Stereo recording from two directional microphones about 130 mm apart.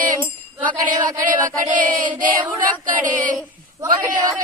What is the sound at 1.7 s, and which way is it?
Female singing, 80° right.